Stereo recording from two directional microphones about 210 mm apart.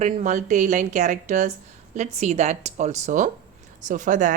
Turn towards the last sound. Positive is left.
turn(degrees=-35)  # may be behind; listen again after turning